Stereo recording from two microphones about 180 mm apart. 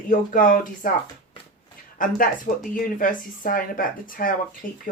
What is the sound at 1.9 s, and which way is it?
Speech, 50° left (ahead or behind).